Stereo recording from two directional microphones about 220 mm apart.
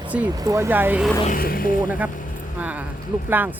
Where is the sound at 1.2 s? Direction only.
40° left (ahead or behind).